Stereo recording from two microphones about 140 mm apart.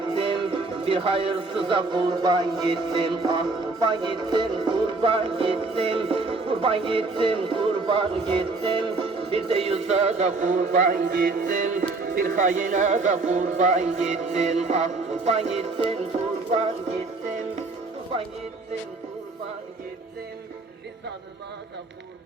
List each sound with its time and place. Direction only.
0.1 s speech: 40° right (ahead or behind)